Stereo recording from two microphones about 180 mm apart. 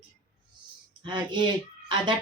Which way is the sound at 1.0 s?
25° right (ahead or behind).